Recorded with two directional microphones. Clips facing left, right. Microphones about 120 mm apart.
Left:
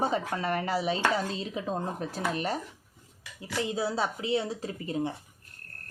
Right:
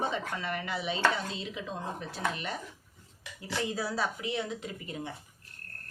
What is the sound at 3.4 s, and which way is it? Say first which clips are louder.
Speech: left 3 dB; 25° left (ahead or behind).